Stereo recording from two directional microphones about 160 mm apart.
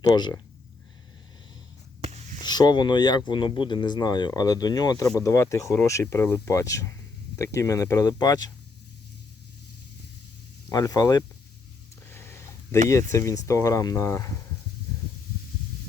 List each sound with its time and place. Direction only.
0.1 s speech: 25° left (ahead or behind)
2.0 s a sound: 40° right (ahead or behind)
2.4 s speech: 25° left (ahead or behind)
10.7 s speech: 20° left (ahead or behind)
12.0 s a sound: 15° left (ahead or behind)
12.9 s speech: 20° left (ahead or behind)